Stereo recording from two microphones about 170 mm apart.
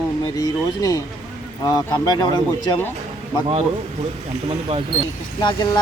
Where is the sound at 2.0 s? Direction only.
25° left (ahead or behind).